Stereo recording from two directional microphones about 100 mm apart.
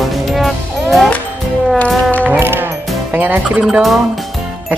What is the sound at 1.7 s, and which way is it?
Music, 15° left (ahead or behind).